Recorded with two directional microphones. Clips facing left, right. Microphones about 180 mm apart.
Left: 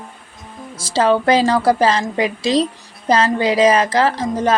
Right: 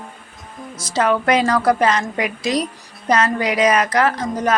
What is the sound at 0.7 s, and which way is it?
A woman's voice, 30° left (ahead or behind).